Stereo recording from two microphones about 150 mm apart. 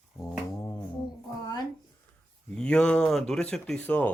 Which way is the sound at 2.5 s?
5° left (ahead or behind).